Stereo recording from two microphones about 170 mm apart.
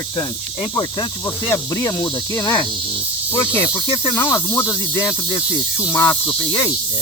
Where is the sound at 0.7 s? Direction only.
25° left (ahead or behind).